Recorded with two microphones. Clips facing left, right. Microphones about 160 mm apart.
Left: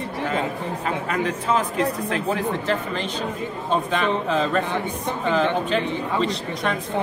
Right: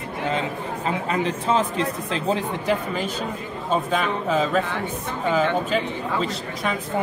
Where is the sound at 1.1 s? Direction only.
30° right (ahead or behind).